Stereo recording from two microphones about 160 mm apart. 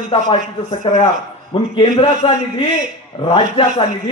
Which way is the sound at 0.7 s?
45° left (ahead or behind).